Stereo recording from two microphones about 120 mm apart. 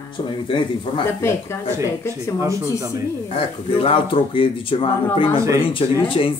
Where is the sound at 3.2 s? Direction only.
50° left (ahead or behind).